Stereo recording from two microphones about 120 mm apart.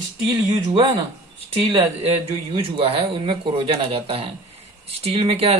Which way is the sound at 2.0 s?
60° right (ahead or behind).